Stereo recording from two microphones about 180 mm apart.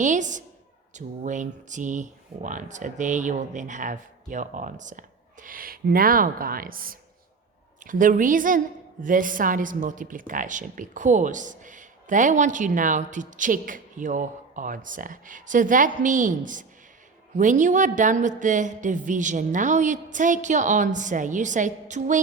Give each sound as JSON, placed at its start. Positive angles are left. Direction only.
{"t": 0.0, "sound": "a woman's voice", "side_deg": -45}